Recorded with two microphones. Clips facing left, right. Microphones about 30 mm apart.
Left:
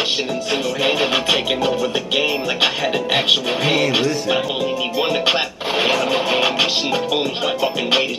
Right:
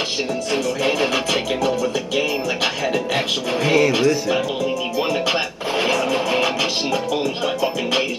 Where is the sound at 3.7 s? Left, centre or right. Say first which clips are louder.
Right 3 dB; left.